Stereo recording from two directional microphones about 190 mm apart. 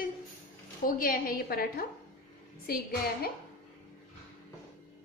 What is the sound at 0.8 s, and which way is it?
A woman's voice, 50° left (ahead or behind).